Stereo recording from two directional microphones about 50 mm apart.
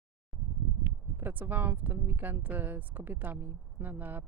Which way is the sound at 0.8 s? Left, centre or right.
Right.